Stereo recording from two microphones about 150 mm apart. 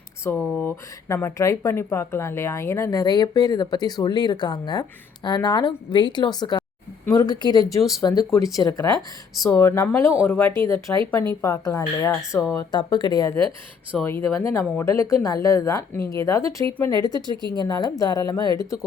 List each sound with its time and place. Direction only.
0.3 s speech: 15° left (ahead or behind)
9.0 s speech: centre (ahead or behind)
9.5 s speech: 15° left (ahead or behind)
14.0 s speech: 15° left (ahead or behind)